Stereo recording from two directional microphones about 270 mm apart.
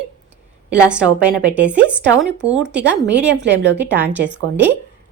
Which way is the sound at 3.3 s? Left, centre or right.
Right.